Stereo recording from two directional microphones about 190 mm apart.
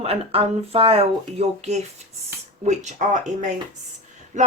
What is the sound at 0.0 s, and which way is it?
Speech, 30° right (ahead or behind).